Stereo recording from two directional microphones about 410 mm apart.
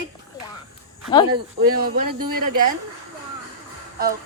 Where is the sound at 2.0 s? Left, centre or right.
Right.